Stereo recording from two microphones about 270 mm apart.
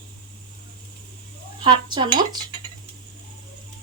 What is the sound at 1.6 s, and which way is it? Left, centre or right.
Speech, centre.